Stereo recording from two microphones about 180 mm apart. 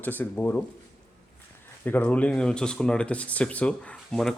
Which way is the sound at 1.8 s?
10° left (ahead or behind).